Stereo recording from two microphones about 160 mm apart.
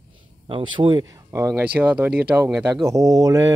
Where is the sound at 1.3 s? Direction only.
20° right (ahead or behind).